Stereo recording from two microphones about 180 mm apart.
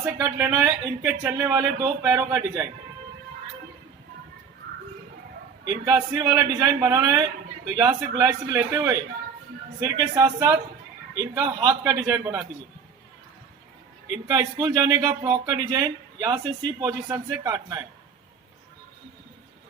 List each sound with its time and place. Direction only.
0.0 s speech: 15° right (ahead or behind)
5.7 s speech: 20° right (ahead or behind)
14.3 s speech: 20° right (ahead or behind)